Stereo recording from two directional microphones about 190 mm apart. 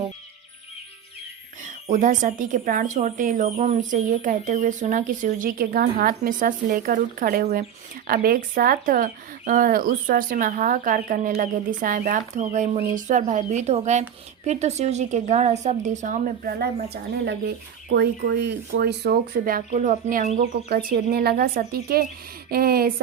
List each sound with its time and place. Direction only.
1.9 s speech: 45° right (ahead or behind)